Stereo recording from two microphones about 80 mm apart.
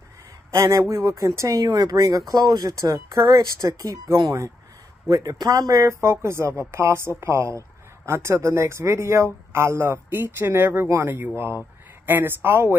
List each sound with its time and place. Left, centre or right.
0.5 s speech: right